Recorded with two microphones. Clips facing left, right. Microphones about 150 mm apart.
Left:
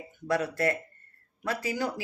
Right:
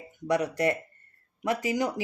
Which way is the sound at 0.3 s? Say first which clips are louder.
Right 2 dB; 15° right (ahead or behind).